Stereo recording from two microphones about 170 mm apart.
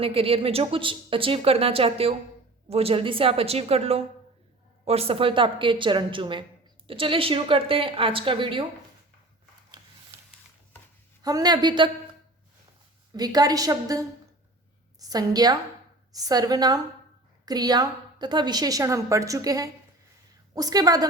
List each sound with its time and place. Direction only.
0.0 s a woman's voice: 35° right (ahead or behind)
9.8 s a sound: 25° right (ahead or behind)
11.2 s a woman's voice: 20° right (ahead or behind)
13.1 s a woman's voice: 25° right (ahead or behind)